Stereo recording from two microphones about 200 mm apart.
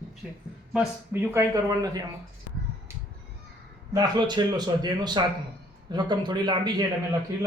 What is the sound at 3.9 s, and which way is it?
Speech, 20° right (ahead or behind).